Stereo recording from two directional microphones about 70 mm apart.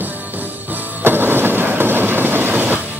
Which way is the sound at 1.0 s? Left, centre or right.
Right.